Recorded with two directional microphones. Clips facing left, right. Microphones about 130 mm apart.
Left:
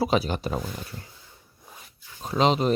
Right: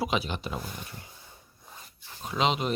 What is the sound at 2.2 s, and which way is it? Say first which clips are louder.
Speech: left 5 dB; 35° left (ahead or behind).